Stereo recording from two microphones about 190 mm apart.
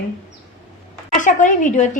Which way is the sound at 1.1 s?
40° left (ahead or behind).